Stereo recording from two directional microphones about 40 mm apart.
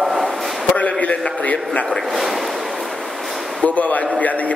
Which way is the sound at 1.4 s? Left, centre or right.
Left.